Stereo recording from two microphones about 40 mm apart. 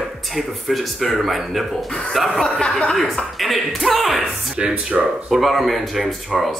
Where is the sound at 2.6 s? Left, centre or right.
Left.